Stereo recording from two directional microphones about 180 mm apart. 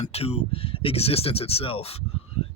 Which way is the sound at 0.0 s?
35° left (ahead or behind).